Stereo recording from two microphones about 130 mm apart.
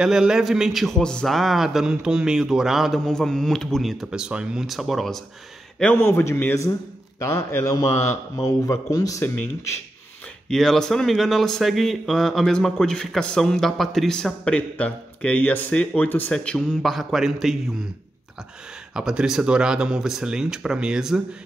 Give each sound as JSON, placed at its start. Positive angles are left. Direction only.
{"t": 0.0, "sound": "a man's voice", "side_deg": -5}
{"t": 5.8, "sound": "a man's voice", "side_deg": 10}
{"t": 10.5, "sound": "a man's voice", "side_deg": 5}
{"t": 18.9, "sound": "a man's voice", "side_deg": -5}